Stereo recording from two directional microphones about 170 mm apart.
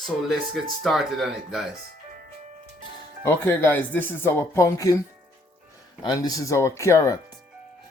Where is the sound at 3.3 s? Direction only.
15° left (ahead or behind).